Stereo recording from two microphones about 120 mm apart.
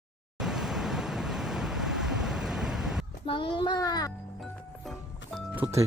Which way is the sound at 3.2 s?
45° left (ahead or behind).